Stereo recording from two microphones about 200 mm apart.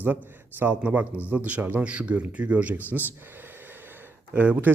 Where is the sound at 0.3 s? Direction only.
10° right (ahead or behind).